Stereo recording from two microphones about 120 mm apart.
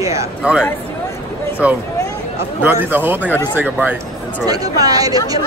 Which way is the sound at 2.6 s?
15° right (ahead or behind).